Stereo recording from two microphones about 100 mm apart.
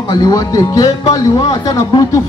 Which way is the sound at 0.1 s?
40° left (ahead or behind).